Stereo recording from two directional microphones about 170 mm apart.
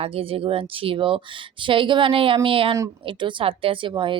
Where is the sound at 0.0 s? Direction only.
35° right (ahead or behind).